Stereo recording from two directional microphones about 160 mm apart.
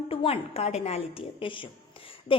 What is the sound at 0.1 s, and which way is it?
A woman's voice, 35° left (ahead or behind).